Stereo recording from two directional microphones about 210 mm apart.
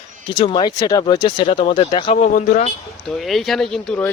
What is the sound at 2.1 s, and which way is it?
Speech, 40° left (ahead or behind).